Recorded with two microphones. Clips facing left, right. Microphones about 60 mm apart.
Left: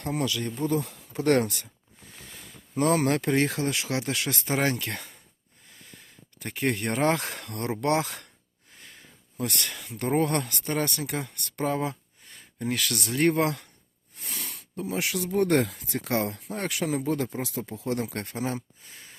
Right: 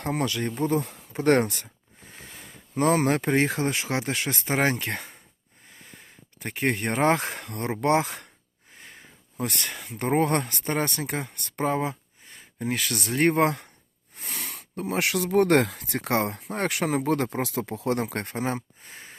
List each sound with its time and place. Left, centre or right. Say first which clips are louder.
0.0 s speech: right 2 dB; right
2.7 s speech: right 1 dB; right
8.7 s sniff: right 3 dB; right
9.4 s speech: right 1 dB; right
12.8 s speech: right 1 dB; right
14.2 s speech: right 2 dB; right